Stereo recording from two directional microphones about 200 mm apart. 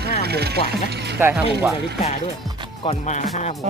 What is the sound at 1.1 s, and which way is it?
Speech, 5° right (ahead or behind).